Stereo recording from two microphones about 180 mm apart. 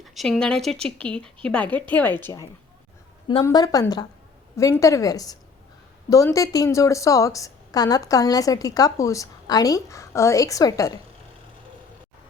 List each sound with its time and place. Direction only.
0.0 s a woman's voice: centre (ahead or behind); by 11.0 s 20° left (ahead or behind)